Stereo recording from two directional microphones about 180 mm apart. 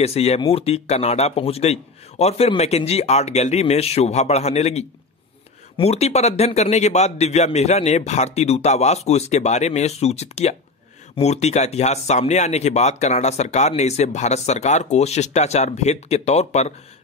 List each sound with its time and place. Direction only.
0.0 s speech: 35° left (ahead or behind)